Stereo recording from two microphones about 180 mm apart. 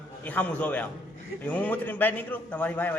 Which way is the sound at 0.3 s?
10° left (ahead or behind).